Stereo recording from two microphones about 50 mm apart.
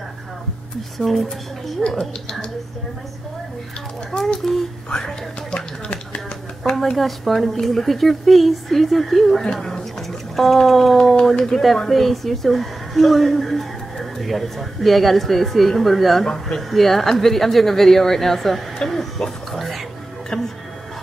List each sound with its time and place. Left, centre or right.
0.9 s a woman's voice: centre
4.4 s a woman's voice: centre
5.5 s speech: left
6.6 s a woman's voice: centre